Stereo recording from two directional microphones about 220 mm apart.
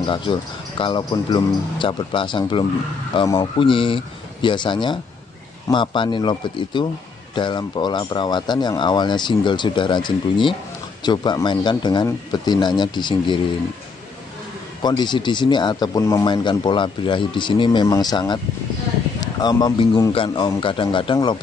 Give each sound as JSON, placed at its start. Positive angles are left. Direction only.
{"t": 0.0, "sound": "speech", "side_deg": 20}
{"t": 14.8, "sound": "speech", "side_deg": 20}